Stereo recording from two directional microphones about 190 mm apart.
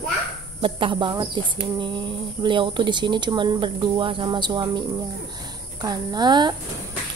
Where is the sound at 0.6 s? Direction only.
25° right (ahead or behind).